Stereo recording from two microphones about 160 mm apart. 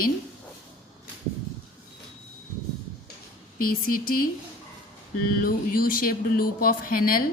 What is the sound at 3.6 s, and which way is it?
Speech, 60° left (ahead or behind).